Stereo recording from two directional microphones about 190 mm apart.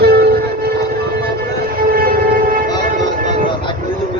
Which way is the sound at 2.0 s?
50° right (ahead or behind).